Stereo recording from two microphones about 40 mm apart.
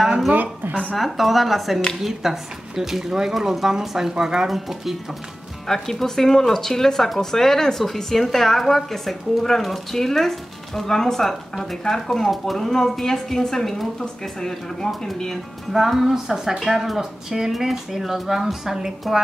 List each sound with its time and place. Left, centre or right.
0.3 s a woman's voice: right
0.9 s speech: centre
4.5 s speech: centre
5.7 s speech: centre
15.7 s speech: centre